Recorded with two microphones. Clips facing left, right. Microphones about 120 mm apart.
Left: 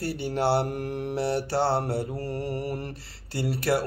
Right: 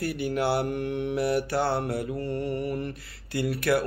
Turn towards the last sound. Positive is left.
turn(degrees=30)  # may be behind; listen again after turning